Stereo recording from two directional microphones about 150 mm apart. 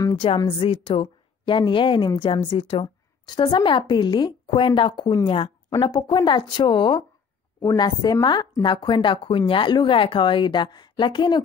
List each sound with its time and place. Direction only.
0.1 s a woman's voice: 35° left (ahead or behind)